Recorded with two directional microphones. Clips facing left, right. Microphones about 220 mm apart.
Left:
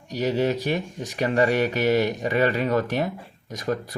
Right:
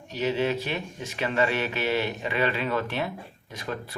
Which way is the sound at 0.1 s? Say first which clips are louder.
Left 3 dB; 40° left (ahead or behind).